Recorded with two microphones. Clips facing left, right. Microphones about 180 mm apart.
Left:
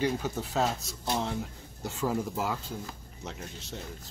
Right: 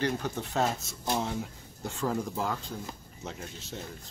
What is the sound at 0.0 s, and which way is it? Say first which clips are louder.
Speech: left 1 dB; 5° left (ahead or behind).